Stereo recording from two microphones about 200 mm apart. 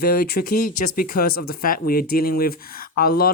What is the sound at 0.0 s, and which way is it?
Speech, 50° left (ahead or behind).